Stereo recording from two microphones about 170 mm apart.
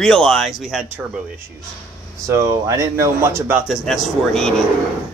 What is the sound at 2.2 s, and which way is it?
Speech, 20° right (ahead or behind).